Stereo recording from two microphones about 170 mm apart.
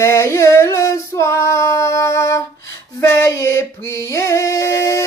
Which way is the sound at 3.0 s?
15° left (ahead or behind).